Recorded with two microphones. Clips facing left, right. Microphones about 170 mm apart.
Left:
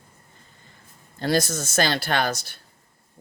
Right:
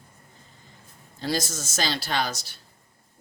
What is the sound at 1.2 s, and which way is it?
Speech, 60° left (ahead or behind).